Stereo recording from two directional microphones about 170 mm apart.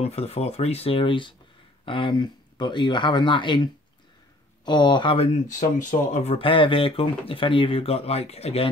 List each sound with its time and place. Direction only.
0.0 s speech: 35° left (ahead or behind)
5.5 s speech: 50° left (ahead or behind)